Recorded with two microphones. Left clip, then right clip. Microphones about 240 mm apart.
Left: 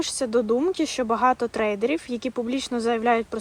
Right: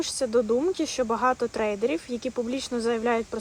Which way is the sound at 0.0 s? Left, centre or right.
Left.